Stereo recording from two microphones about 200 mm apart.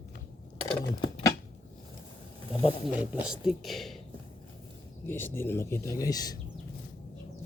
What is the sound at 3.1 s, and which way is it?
Speech, 5° right (ahead or behind).